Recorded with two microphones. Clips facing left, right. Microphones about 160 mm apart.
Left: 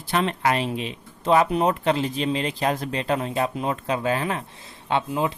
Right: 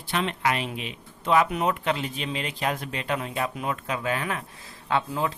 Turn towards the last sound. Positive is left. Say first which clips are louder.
# left 2 dB
turn(degrees=20)  # may be behind; listen again after turning